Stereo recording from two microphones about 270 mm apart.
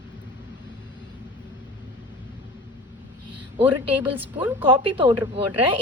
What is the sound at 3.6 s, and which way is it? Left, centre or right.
A woman's voice, centre.